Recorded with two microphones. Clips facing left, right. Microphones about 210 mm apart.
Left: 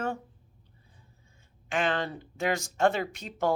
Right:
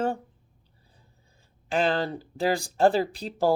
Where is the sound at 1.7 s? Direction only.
35° right (ahead or behind).